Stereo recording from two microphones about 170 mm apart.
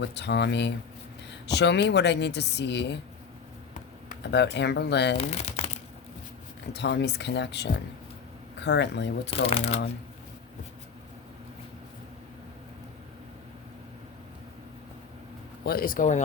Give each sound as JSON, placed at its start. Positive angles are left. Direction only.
{"t": 0.0, "sound": "speech", "side_deg": 90}
{"t": 4.2, "sound": "speech", "side_deg": 90}
{"t": 5.1, "sound": "speech", "side_deg": 40}
{"t": 6.7, "sound": "speech", "side_deg": 90}
{"t": 9.3, "sound": "speech", "side_deg": 35}
{"t": 15.6, "sound": "speech", "side_deg": 60}